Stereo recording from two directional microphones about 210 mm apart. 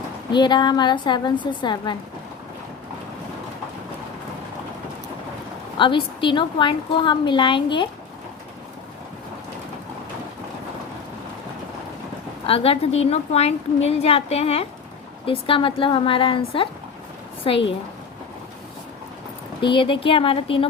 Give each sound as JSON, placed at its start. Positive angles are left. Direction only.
{"t": 0.3, "sound": "a woman's voice", "side_deg": 20}
{"t": 5.7, "sound": "a woman's voice", "side_deg": 25}
{"t": 12.5, "sound": "a woman's voice", "side_deg": 25}
{"t": 19.6, "sound": "a woman's voice", "side_deg": 25}